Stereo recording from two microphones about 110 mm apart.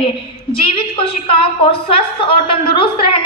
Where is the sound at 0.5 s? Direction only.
55° left (ahead or behind).